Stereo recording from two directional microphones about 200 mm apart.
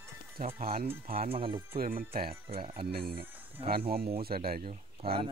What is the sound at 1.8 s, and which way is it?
Speech, 45° right (ahead or behind).